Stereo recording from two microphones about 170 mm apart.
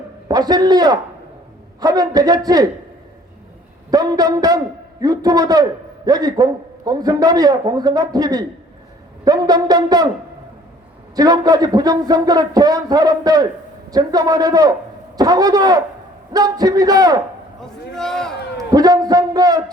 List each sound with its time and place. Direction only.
0.3 s a man's voice: 25° right (ahead or behind)
3.9 s a man's voice: 20° right (ahead or behind)
11.1 s a man's voice: 20° right (ahead or behind)
17.6 s a man's voice: 5° left (ahead or behind)
18.5 s a sound: 20° right (ahead or behind)